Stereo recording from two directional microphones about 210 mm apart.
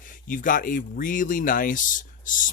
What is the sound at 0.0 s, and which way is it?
Speech, 40° left (ahead or behind).